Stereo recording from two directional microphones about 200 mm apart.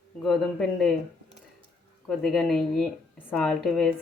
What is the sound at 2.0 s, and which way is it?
Speech, centre (ahead or behind).